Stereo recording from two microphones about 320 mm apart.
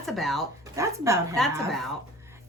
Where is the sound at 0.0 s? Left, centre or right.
Centre.